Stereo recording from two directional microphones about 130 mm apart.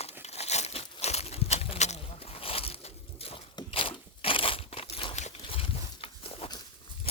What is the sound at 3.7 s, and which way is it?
Crunch, 45° left (ahead or behind).